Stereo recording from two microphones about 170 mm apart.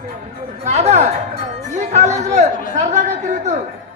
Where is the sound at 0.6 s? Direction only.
40° right (ahead or behind).